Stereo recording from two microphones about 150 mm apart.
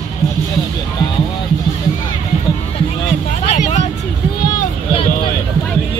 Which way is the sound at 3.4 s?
50° left (ahead or behind).